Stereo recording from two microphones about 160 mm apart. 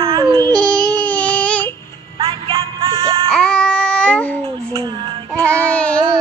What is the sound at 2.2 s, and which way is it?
Music, 35° right (ahead or behind).